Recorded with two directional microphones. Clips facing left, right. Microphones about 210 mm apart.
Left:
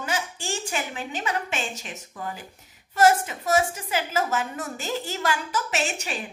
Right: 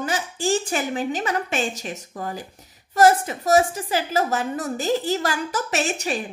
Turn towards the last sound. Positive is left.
turn(degrees=-40)  # may be behind; listen again after turning